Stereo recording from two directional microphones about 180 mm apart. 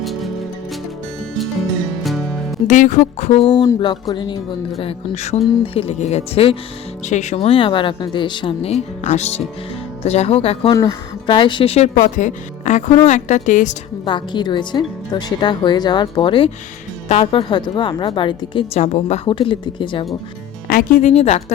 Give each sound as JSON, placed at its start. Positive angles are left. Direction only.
{"t": 2.0, "sound": "music", "side_deg": 0}
{"t": 2.6, "sound": "speech", "side_deg": 45}
{"t": 3.5, "sound": "speech", "side_deg": 20}
{"t": 14.0, "sound": "speech", "side_deg": 25}
{"t": 20.7, "sound": "speech", "side_deg": 50}